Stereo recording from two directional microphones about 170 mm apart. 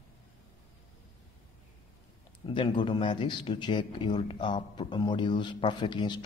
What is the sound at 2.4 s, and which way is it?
Speech, 30° left (ahead or behind).